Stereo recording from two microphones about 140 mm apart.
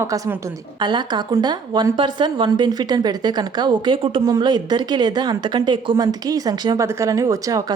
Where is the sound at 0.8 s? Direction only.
30° right (ahead or behind).